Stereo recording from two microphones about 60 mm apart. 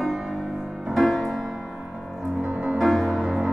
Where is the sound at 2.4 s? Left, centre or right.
Right.